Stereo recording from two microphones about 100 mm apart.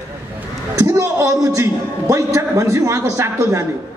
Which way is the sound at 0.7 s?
35° right (ahead or behind).